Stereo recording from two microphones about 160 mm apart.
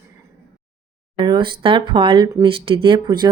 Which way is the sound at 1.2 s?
30° right (ahead or behind).